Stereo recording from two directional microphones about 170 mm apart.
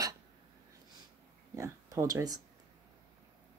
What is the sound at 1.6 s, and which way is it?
Speech, 20° right (ahead or behind).